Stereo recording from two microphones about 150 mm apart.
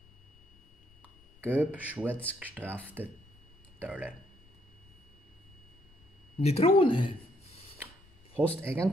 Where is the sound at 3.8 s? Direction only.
10° right (ahead or behind).